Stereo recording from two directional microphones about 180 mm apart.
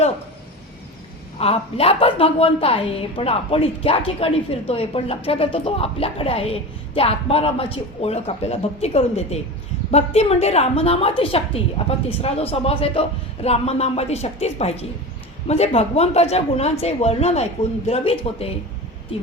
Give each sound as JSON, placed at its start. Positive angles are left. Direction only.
{"t": 1.4, "sound": "a woman's voice", "side_deg": 35}